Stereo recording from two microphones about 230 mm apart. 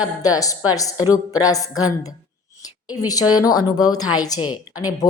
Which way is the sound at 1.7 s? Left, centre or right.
Left.